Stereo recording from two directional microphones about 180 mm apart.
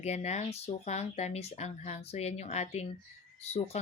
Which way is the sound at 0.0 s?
40° left (ahead or behind).